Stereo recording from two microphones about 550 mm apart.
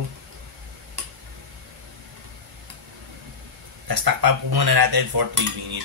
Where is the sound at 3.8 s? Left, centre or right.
Right.